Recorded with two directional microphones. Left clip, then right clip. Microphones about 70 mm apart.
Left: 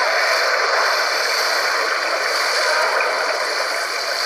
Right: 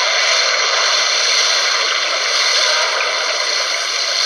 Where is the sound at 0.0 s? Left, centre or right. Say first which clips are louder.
Right 2 dB; right.